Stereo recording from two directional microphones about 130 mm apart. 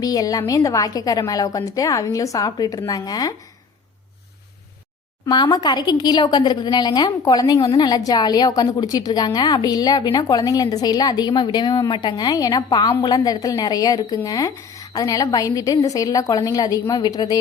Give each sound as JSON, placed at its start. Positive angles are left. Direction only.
{"t": 0.0, "sound": "a woman's voice", "side_deg": 30}
{"t": 5.2, "sound": "a woman's voice", "side_deg": 30}